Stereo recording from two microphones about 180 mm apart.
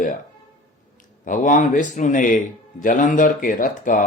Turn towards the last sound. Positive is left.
turn(degrees=50)  # may be behind; listen again after turning